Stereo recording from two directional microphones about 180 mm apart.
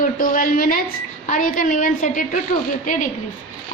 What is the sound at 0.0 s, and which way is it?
A woman's voice, 50° left (ahead or behind).